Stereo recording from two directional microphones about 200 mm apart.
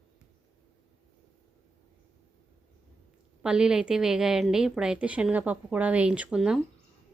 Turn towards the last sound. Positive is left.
turn(degrees=0)  # may be behind; listen again after turning